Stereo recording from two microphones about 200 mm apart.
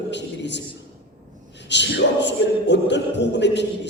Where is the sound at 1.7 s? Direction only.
60° left (ahead or behind).